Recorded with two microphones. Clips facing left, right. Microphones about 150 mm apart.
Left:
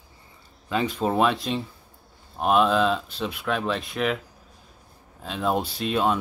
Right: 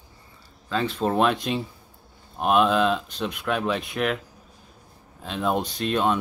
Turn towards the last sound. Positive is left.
turn(degrees=0)  # may be behind; listen again after turning